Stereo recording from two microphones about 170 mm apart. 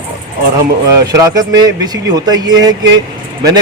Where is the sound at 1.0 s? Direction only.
20° right (ahead or behind).